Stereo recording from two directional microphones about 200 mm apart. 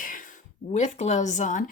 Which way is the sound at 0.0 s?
40° left (ahead or behind).